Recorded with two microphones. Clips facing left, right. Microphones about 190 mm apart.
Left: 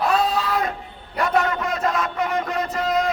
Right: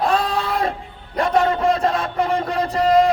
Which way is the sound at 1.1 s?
30° right (ahead or behind).